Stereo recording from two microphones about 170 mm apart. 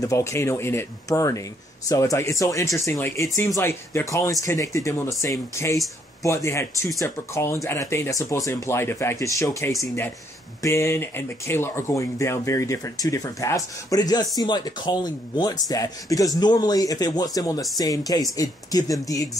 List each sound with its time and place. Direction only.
0.0 s speech: 15° left (ahead or behind)